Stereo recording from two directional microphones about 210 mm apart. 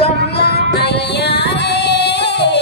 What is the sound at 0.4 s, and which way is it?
Music, 50° left (ahead or behind).